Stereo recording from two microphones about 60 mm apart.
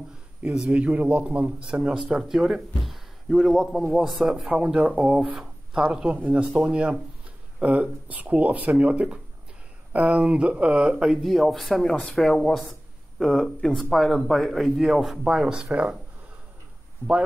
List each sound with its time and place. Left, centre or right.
0.5 s speech: centre
0.7 s speech: right
1.7 s speech: centre
4.5 s speech: centre
5.3 s a sound: centre
5.9 s speech: right
11.2 s speech: centre